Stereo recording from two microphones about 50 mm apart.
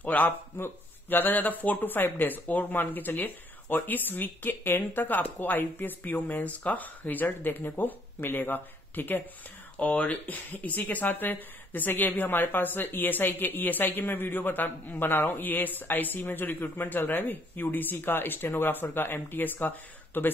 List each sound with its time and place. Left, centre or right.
0.0 s speech: left
9.8 s speech: left